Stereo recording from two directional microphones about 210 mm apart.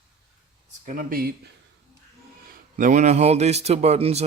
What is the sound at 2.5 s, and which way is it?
Speech, 40° right (ahead or behind).